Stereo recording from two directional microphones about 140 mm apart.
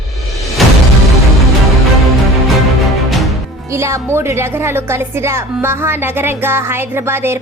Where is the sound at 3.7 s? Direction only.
20° right (ahead or behind).